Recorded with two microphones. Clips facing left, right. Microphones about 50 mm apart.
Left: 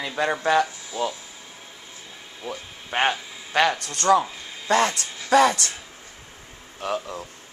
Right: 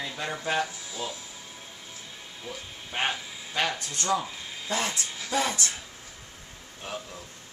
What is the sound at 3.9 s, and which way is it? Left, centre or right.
Speech, left.